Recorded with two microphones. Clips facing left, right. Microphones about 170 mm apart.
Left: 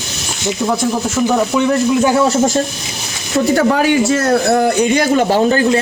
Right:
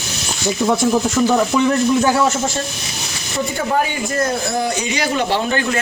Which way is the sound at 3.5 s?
80° left.